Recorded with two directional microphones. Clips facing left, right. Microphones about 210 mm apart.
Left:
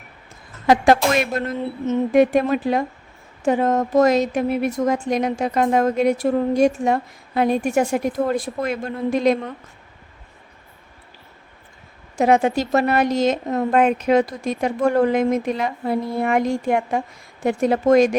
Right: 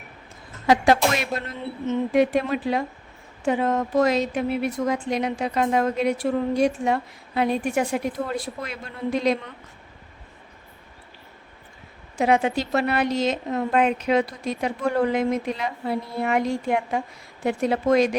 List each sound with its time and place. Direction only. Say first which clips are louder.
0.7 s speech: left 3 dB; 50° left (ahead or behind)
12.1 s speech: left 4 dB; 45° left (ahead or behind)